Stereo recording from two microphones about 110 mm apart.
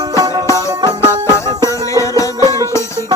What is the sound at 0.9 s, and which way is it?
Music, 25° left (ahead or behind).